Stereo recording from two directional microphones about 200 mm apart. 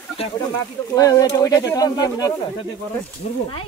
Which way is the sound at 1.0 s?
15° left (ahead or behind).